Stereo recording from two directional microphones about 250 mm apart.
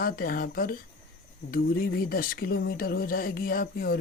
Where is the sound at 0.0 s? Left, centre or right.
Left.